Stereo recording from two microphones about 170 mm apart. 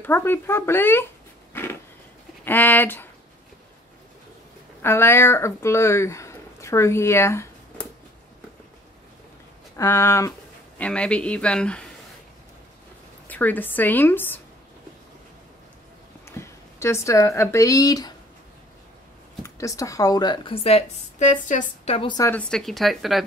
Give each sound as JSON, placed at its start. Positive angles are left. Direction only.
{"t": 0.0, "sound": "a woman's voice", "side_deg": 10}
{"t": 1.5, "sound": "a sound", "side_deg": 15}
{"t": 2.4, "sound": "a woman's voice", "side_deg": 10}
{"t": 4.8, "sound": "speech", "side_deg": 15}
{"t": 9.8, "sound": "a woman's voice", "side_deg": 15}
{"t": 10.8, "sound": "speech", "side_deg": 5}
{"t": 13.3, "sound": "a woman's voice", "side_deg": 10}
{"t": 16.3, "sound": "speech", "side_deg": 15}
{"t": 19.4, "sound": "speech", "side_deg": 20}
{"t": 22.1, "sound": "a woman's voice", "side_deg": 20}
{"t": 22.4, "sound": "speech", "side_deg": 0}